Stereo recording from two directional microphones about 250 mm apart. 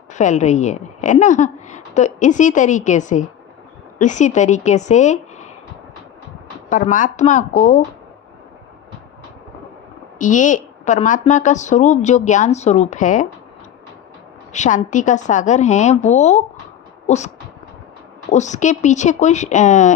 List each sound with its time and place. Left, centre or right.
0.1 s a woman's voice: left
6.7 s a woman's voice: left
10.2 s a woman's voice: left
14.5 s a woman's voice: left